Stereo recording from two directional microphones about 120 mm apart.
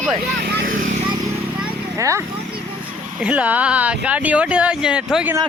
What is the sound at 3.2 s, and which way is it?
Speech, 10° right (ahead or behind).